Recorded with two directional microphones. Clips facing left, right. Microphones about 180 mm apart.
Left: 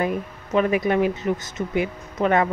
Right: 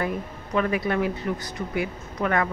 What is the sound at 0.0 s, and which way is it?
Speech, 20° left (ahead or behind).